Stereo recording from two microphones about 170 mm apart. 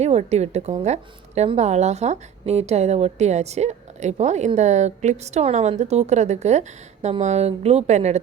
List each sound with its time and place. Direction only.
0.0 s a woman's voice: 40° right (ahead or behind)